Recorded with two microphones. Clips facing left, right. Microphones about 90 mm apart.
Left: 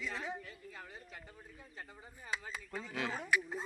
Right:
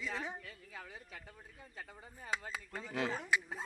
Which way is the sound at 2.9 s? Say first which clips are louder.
Right 3 dB; 30° right (ahead or behind).